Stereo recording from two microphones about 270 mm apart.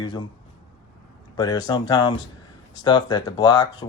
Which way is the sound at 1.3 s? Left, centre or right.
Centre.